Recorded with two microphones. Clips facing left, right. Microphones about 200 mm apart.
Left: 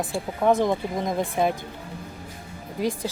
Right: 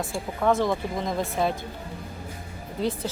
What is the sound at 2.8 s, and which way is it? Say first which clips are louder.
Speech: left 1 dB; 15° left (ahead or behind).